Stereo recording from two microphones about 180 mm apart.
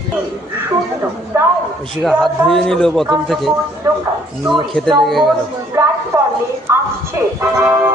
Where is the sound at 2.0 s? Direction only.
Centre (ahead or behind).